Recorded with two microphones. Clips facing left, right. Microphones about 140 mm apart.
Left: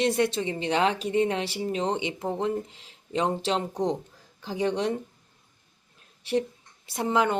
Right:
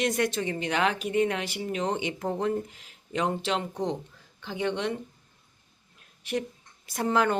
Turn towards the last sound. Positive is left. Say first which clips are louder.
# left 1 dB
turn(degrees=20)  # may be behind; listen again after turning